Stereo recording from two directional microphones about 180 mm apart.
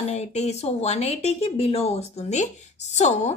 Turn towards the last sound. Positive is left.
turn(degrees=40)  # may be behind; listen again after turning